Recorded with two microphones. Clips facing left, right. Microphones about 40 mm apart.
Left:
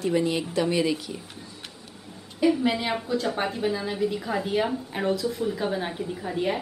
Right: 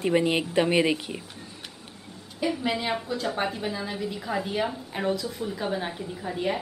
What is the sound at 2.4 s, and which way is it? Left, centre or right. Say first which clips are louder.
A woman's voice: left 4 dB; centre.